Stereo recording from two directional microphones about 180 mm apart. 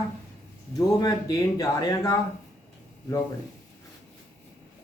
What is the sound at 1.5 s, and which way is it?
Speech, 20° left (ahead or behind).